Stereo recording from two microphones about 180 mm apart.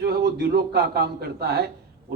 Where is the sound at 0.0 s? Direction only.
60° right (ahead or behind).